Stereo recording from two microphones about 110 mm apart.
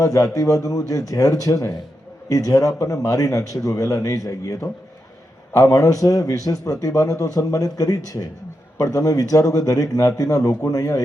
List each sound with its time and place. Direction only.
0.0 s a man's voice: 30° left (ahead or behind)